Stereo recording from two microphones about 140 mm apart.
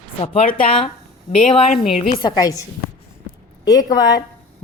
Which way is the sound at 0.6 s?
40° left (ahead or behind).